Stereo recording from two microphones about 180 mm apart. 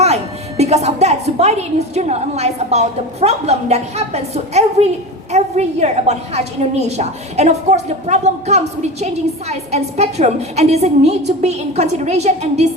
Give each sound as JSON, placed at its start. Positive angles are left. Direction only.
{"t": 0.0, "sound": "a woman's voice", "side_deg": -35}